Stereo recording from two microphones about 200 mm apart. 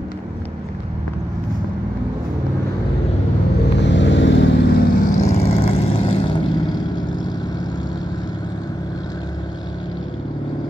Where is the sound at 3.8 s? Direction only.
65° left (ahead or behind); by 10.0 s 20° left (ahead or behind).